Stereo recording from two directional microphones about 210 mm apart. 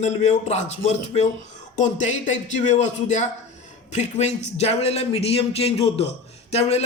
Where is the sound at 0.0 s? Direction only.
30° left (ahead or behind).